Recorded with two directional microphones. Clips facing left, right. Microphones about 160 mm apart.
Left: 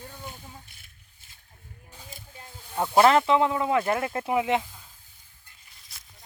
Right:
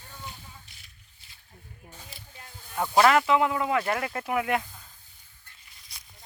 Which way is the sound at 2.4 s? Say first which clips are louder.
Left 2 dB; 20° left (ahead or behind).